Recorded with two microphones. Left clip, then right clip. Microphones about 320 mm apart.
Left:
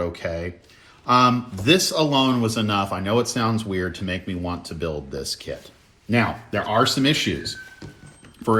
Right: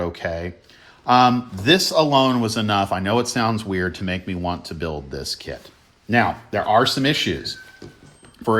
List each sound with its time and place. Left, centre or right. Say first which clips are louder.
0.0 s speech: right 1 dB; right